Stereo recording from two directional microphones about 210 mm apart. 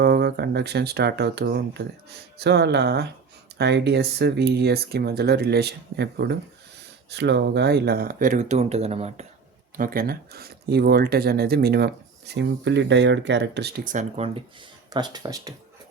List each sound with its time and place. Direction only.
0.0 s speech: 50° right (ahead or behind); by 9.2 s 30° right (ahead or behind)
9.7 s speech: 40° right (ahead or behind)
14.8 s speech: 20° right (ahead or behind)